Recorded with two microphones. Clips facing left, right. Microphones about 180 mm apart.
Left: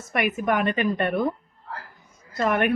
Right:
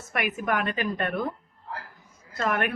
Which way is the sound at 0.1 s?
Centre (ahead or behind).